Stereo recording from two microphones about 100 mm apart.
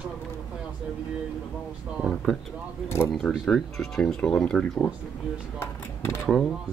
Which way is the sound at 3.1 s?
5° left (ahead or behind).